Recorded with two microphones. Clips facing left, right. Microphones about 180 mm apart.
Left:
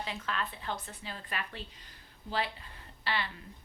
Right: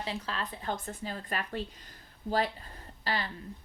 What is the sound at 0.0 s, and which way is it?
A woman's voice, 30° right (ahead or behind).